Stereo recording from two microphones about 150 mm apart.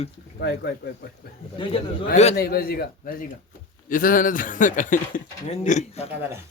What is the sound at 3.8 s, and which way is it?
Speech, 65° left (ahead or behind).